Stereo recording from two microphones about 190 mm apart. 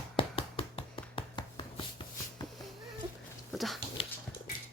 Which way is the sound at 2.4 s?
Centre (ahead or behind).